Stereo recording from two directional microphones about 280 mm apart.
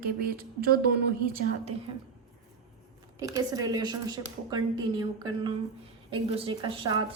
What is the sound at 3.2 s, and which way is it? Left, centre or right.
A man's voice, centre.